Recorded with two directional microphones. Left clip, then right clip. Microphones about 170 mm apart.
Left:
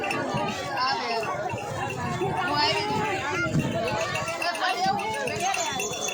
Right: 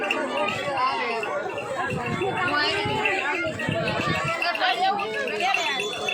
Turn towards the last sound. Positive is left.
turn(degrees=25)  # may be behind; listen again after turning